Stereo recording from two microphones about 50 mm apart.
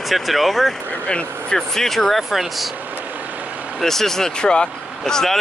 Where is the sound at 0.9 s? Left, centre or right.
Left.